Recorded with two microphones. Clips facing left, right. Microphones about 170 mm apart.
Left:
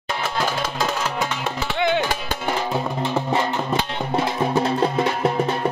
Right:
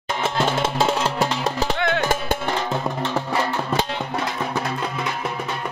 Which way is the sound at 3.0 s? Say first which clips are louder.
Left 2 dB; 15° left (ahead or behind).